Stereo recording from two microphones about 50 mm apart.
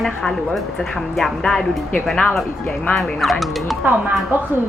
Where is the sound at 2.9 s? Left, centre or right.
Centre.